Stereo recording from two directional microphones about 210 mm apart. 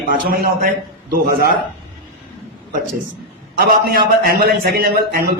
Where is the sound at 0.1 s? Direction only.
45° right (ahead or behind).